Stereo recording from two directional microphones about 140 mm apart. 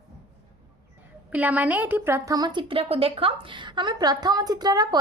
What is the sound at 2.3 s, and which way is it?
A woman's voice, 30° right (ahead or behind).